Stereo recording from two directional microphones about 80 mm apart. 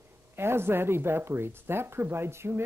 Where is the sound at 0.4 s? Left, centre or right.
Right.